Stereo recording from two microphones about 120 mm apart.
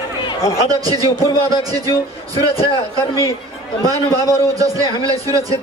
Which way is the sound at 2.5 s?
55° left (ahead or behind).